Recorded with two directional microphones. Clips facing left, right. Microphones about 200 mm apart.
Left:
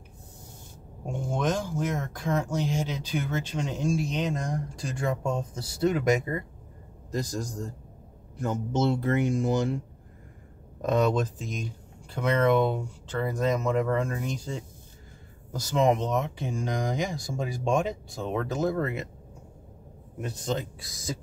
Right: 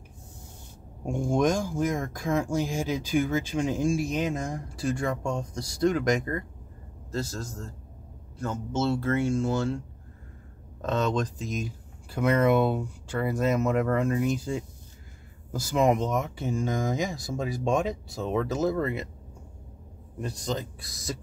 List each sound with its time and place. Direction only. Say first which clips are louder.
1.0 s speech: right 4 dB; 10° right (ahead or behind); by 9.8 s 15° left (ahead or behind)
10.8 s speech: left 3 dB; 10° left (ahead or behind)
20.2 s speech: left 1 dB; centre (ahead or behind)